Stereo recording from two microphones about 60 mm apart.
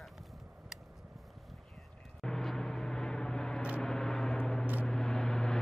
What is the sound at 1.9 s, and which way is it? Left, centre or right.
Vehicle, centre.